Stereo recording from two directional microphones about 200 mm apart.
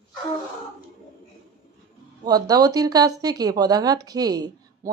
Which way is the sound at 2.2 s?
20° right (ahead or behind).